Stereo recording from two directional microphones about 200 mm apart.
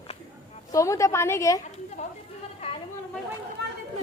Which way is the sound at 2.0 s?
35° left (ahead or behind).